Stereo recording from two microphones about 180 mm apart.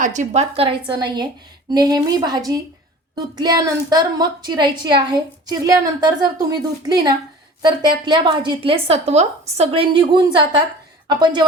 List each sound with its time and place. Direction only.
0.0 s a woman's voice: 40° right (ahead or behind); by 11.4 s 25° right (ahead or behind)